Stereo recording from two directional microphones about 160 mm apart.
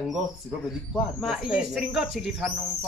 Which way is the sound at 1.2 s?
5° right (ahead or behind).